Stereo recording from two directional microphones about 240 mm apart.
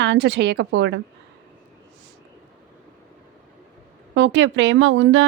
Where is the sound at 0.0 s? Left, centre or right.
Right.